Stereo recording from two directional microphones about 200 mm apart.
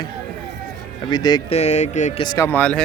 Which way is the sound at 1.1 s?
20° left (ahead or behind).